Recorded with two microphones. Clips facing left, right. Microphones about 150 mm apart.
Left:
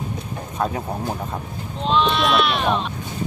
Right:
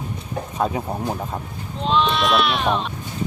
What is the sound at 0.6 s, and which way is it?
Speech, 5° right (ahead or behind).